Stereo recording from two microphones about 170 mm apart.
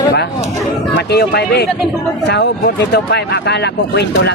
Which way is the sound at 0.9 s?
75° left (ahead or behind).